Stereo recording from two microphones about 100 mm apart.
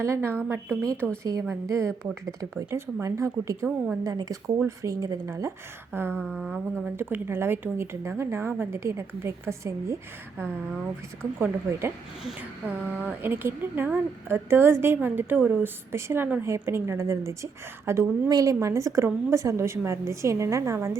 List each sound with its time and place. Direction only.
0.0 s a woman's voice: 25° right (ahead or behind)
1.2 s a woman's voice: 40° right (ahead or behind)
11.3 s a woman's voice: 20° right (ahead or behind)